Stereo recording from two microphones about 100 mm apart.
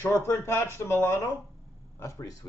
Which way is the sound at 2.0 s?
30° left (ahead or behind).